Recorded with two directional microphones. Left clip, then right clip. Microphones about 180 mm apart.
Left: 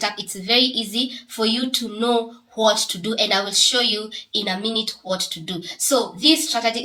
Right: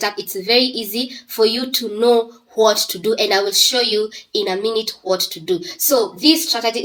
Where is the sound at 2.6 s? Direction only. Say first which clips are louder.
Right 4 dB; 35° right (ahead or behind).